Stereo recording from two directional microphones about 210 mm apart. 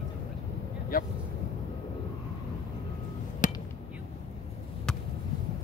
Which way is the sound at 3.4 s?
40° left (ahead or behind).